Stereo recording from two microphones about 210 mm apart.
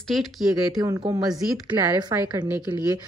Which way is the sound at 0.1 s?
Centre (ahead or behind).